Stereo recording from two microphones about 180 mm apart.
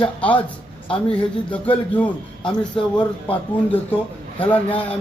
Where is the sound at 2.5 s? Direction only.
25° left (ahead or behind).